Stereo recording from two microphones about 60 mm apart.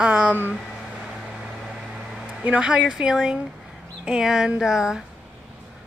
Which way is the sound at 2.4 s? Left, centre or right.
Right.